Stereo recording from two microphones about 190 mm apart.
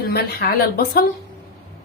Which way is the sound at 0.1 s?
55° left (ahead or behind).